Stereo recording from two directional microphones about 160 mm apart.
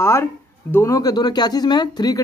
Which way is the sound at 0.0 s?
15° left (ahead or behind).